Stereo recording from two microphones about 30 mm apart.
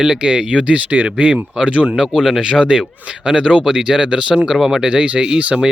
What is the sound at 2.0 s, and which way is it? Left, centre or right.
Speech, right.